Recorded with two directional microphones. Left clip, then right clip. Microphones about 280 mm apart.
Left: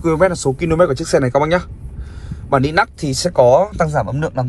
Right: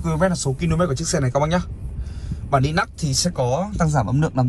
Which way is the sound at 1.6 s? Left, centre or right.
Centre.